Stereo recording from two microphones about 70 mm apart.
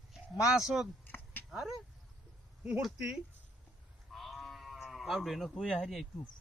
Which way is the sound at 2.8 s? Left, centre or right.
Centre.